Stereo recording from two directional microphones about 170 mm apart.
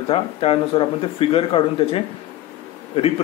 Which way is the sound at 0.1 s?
35° left (ahead or behind).